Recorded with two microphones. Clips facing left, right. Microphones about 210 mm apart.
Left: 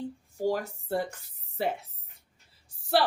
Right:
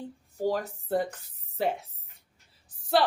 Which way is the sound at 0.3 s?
10° left (ahead or behind).